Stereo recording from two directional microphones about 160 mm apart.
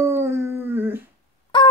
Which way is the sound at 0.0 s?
15° right (ahead or behind).